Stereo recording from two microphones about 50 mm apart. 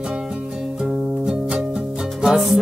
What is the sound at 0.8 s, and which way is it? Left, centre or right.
Music, centre.